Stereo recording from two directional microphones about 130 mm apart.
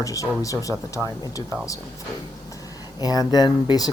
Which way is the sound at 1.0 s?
5° right (ahead or behind).